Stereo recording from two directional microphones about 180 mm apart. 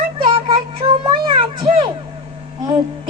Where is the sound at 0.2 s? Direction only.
30° right (ahead or behind).